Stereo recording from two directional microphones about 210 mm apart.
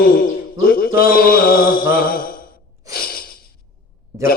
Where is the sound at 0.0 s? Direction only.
45° left (ahead or behind).